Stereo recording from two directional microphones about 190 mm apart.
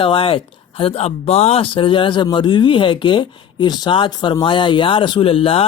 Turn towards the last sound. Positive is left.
turn(degrees=30)  # may be behind; listen again after turning